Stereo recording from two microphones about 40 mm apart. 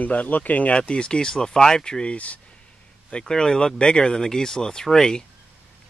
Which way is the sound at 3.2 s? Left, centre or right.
Centre.